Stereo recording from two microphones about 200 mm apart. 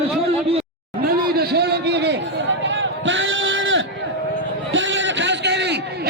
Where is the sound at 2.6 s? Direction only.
65° right (ahead or behind).